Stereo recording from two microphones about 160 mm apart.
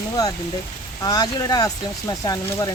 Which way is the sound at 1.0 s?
25° left (ahead or behind).